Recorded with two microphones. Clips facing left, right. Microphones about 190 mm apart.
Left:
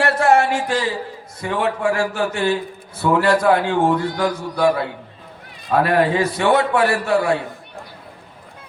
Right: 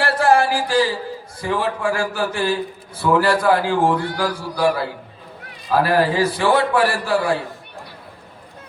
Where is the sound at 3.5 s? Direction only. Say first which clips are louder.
Left 1 dB; 30° right (ahead or behind).